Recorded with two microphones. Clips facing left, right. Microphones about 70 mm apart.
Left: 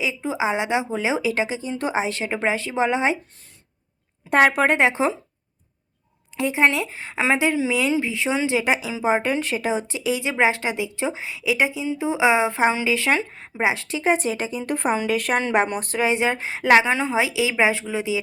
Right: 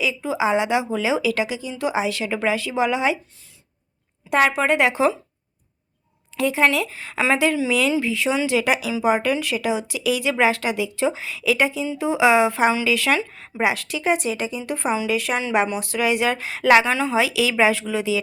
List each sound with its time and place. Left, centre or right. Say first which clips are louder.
0.0 s speech: right 2 dB; left
4.3 s a woman's voice: left 1 dB; left
4.8 s speech: right 1 dB; left
6.3 s speech: right 1 dB; left